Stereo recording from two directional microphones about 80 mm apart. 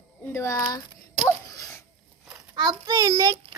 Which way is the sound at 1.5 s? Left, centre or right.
Left.